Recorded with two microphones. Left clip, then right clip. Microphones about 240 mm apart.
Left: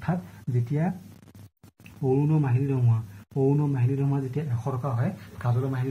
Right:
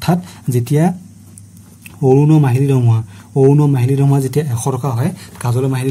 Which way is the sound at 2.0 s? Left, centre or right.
Right.